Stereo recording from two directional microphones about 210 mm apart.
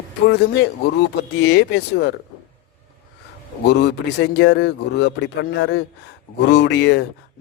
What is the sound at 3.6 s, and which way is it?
Speech, 50° left (ahead or behind).